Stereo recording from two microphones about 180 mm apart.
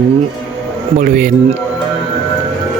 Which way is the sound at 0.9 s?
50° right (ahead or behind).